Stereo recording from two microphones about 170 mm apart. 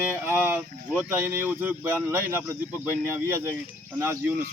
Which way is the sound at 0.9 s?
10° right (ahead or behind).